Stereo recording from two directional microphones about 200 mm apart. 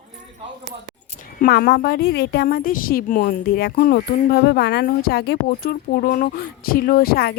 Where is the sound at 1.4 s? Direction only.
50° left (ahead or behind).